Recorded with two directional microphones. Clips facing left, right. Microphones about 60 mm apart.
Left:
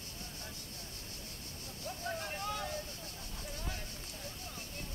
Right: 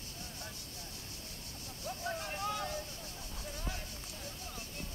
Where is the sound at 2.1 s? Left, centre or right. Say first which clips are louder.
Right 1 dB; centre.